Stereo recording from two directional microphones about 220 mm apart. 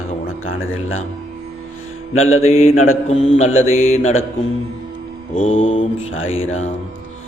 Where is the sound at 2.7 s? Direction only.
65° left (ahead or behind).